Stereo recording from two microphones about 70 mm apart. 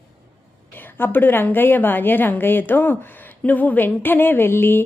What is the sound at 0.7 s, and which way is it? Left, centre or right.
A woman's voice, left.